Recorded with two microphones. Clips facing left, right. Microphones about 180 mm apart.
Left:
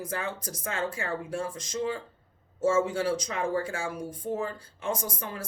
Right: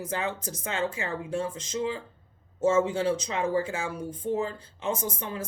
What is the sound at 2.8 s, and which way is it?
Speech, 25° right (ahead or behind).